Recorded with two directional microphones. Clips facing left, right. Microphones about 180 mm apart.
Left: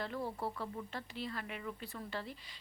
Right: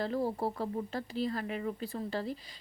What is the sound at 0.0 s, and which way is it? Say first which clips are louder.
Speech: right 7 dB; 40° right (ahead or behind).